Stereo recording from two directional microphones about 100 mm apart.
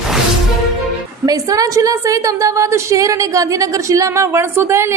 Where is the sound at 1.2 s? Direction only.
40° right (ahead or behind).